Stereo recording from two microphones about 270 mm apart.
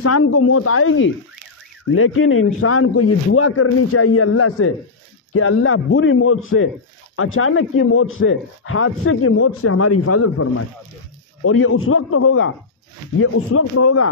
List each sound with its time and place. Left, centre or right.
0.0 s speech: left